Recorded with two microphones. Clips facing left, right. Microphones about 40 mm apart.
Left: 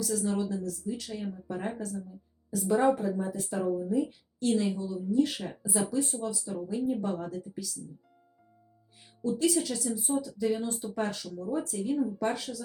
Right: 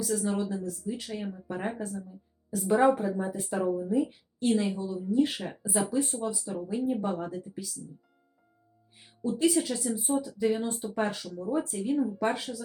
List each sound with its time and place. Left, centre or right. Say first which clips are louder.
0.0 s a woman's voice: right 1 dB; right
9.4 s a woman's voice: right 3 dB; centre